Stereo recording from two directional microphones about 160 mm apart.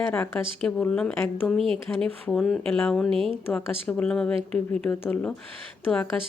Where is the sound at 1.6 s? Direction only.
35° right (ahead or behind).